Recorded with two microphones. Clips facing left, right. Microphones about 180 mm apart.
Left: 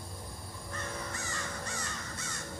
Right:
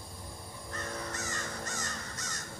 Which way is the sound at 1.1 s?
40° right (ahead or behind).